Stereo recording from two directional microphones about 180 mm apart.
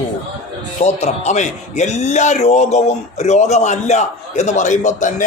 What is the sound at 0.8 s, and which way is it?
A man's voice, 40° left (ahead or behind).